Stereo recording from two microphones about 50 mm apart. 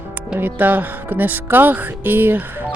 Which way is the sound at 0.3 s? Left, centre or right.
Right.